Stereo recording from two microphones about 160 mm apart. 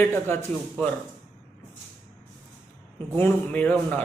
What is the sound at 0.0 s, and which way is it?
Speech, 15° left (ahead or behind).